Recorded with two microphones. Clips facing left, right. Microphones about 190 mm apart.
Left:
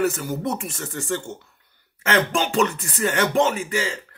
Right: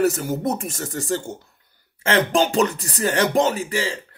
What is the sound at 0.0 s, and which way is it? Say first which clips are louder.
Speech: right 3 dB; 40° right (ahead or behind).